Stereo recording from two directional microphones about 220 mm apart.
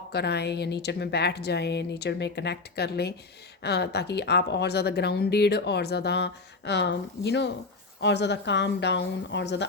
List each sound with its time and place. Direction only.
0.1 s a woman's voice: 50° left (ahead or behind)